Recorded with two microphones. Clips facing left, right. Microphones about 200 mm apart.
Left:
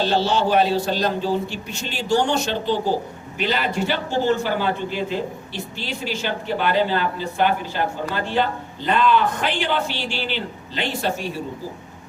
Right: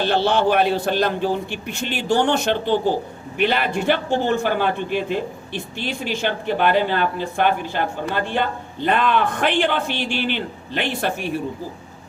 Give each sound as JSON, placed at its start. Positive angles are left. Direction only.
{"t": 0.0, "sound": "a man's voice", "side_deg": -55}